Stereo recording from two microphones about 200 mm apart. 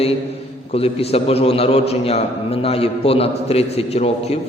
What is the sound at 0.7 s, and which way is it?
A man's voice, 30° left (ahead or behind).